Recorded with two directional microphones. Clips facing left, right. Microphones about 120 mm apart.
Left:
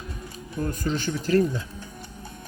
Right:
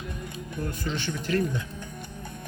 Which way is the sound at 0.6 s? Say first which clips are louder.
Left 5 dB; 40° left (ahead or behind).